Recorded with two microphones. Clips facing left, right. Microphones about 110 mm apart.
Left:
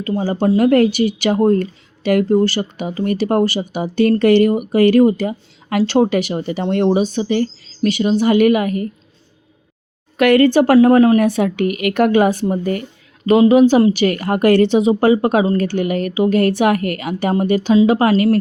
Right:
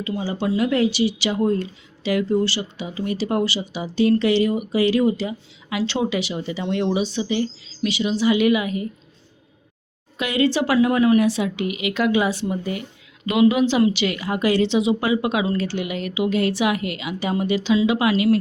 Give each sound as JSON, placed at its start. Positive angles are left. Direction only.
{"t": 0.0, "sound": "speech", "side_deg": 45}
{"t": 10.2, "sound": "speech", "side_deg": 60}